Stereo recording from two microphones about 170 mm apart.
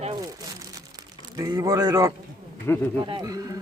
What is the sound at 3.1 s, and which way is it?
Speech, 25° right (ahead or behind).